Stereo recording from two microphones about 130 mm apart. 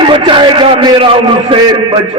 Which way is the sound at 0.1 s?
40° right (ahead or behind).